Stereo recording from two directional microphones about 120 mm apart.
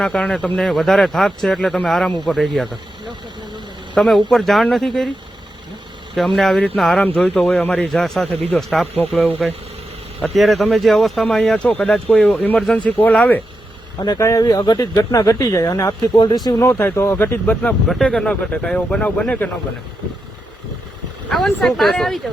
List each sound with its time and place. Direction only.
0.0 s speech: 5° left (ahead or behind)
3.9 s speech: centre (ahead or behind)
6.1 s speech: centre (ahead or behind)
7.0 s speech: 15° left (ahead or behind)
14.0 s speech: 30° left (ahead or behind); by 19.5 s 10° left (ahead or behind)
21.2 s speech: centre (ahead or behind)